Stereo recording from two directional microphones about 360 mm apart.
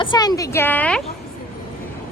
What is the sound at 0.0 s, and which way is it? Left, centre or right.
A woman's voice, centre.